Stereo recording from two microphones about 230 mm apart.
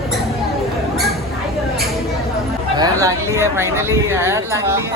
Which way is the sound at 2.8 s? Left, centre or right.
Centre.